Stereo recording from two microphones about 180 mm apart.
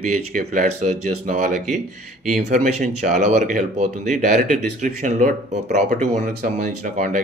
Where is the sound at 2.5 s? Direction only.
40° right (ahead or behind).